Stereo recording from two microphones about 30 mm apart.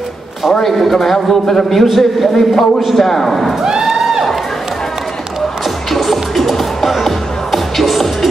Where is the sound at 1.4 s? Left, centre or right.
Centre.